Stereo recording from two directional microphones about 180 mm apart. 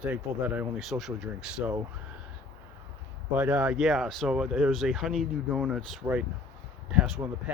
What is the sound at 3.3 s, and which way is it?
Speech, 5° right (ahead or behind).